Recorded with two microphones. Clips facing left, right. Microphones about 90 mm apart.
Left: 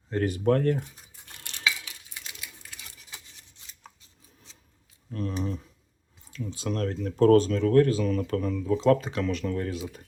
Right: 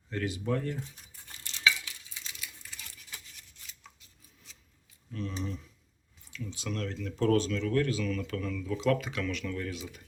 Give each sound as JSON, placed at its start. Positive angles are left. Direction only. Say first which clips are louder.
{"t": 0.1, "sound": "a sound", "louder": "left 8 dB", "side_deg": 45}
{"t": 2.1, "sound": "sewing machine", "louder": "left 4 dB", "side_deg": 60}
{"t": 6.3, "sound": "speech", "louder": "left 6 dB", "side_deg": 40}